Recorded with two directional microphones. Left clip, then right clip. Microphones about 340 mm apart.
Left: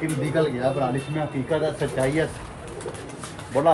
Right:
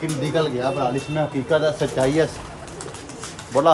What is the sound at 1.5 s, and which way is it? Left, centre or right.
Speech, centre.